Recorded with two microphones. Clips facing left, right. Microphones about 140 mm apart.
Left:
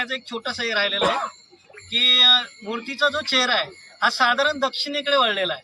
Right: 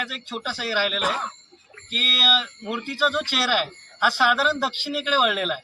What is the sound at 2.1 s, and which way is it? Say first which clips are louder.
Speech: right 2 dB; 5° right (ahead or behind).